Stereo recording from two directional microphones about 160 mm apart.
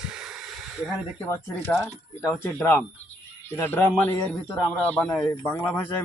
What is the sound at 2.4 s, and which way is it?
A man's voice, 10° left (ahead or behind).